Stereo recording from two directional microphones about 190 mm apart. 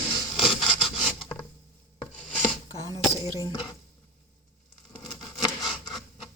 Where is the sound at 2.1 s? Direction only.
5° left (ahead or behind).